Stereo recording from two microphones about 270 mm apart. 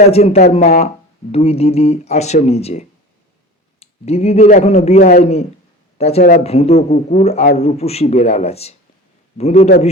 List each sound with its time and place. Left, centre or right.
0.1 s a man's voice: left